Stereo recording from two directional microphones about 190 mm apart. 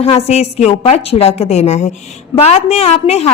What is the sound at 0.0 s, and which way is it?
A woman's voice, 35° left (ahead or behind).